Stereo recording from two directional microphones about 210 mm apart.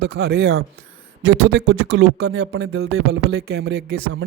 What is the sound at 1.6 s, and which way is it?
Speech, 75° right (ahead or behind).